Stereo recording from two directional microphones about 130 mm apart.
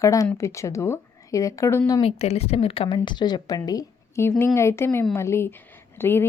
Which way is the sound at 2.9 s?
35° left (ahead or behind).